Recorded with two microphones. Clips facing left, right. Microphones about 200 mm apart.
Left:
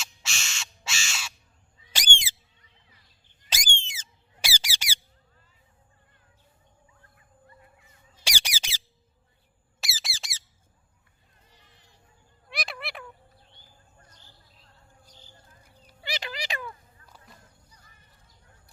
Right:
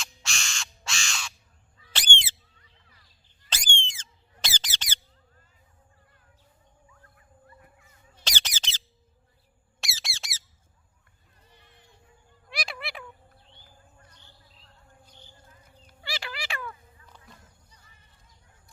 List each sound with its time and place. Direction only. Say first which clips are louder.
0.0 s crow: right 1 dB; 5° left (ahead or behind)
1.8 s bird: left 1 dB; 10° left (ahead or behind)
3.5 s squeak: even; 10° left (ahead or behind)
8.2 s squeak: even; 10° left (ahead or behind)
9.8 s squawk: even; centre (ahead or behind)
12.5 s a sound: even; centre (ahead or behind)
16.0 s a sound: left 2 dB; 20° left (ahead or behind)